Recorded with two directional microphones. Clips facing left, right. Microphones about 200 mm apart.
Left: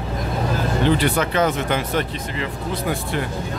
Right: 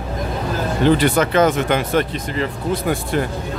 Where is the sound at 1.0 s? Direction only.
45° right (ahead or behind).